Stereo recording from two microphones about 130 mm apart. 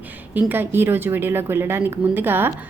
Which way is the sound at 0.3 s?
15° right (ahead or behind).